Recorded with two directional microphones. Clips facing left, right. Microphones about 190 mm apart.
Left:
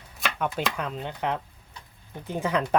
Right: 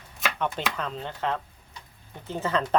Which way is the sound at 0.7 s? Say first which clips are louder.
Left 1 dB; 10° left (ahead or behind).